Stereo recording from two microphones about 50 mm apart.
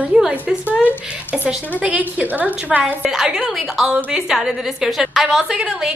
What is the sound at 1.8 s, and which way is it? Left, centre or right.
A woman's voice, right.